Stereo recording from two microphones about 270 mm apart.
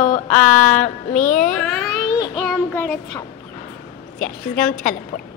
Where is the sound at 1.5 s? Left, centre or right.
Centre.